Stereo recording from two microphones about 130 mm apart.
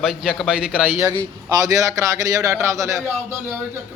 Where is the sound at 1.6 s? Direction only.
25° right (ahead or behind).